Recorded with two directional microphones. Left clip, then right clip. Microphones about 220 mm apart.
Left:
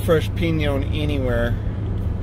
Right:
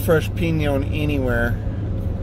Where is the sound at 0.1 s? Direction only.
15° right (ahead or behind).